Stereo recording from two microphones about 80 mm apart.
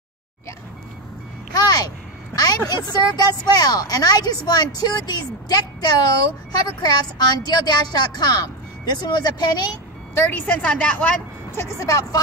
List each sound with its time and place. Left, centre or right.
1.5 s a sound: left
2.3 s a woman's voice: left
10.1 s a woman's voice: left
11.5 s speech: left